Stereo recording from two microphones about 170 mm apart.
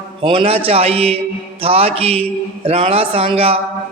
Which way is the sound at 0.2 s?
30° right (ahead or behind).